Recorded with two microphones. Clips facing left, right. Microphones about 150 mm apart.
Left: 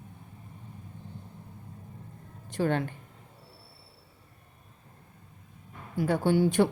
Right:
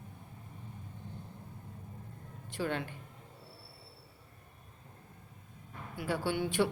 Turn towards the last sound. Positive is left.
turn(degrees=40)  # may be behind; listen again after turning